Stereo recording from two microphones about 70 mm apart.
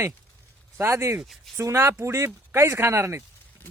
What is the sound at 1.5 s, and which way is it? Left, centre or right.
Speech, right.